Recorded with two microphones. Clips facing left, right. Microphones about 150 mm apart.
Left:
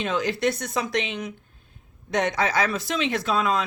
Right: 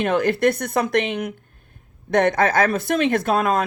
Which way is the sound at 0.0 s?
55° right (ahead or behind).